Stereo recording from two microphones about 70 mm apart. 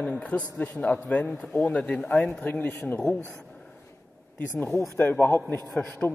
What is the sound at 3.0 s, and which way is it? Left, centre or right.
Speech, centre.